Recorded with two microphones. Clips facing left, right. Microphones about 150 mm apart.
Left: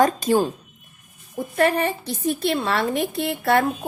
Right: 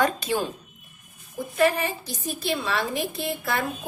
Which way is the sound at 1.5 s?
55° left (ahead or behind).